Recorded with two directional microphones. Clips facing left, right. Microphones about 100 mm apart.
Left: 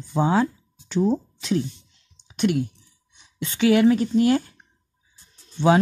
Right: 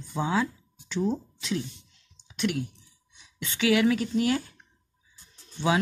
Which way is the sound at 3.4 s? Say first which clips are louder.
Left 6 dB; 35° left (ahead or behind).